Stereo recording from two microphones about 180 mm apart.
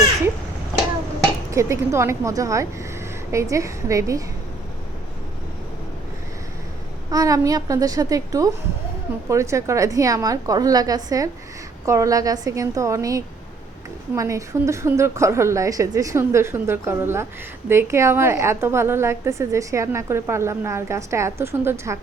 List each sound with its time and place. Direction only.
1.5 s a woman's voice: 15° right (ahead or behind)
7.1 s a woman's voice: 20° right (ahead or behind)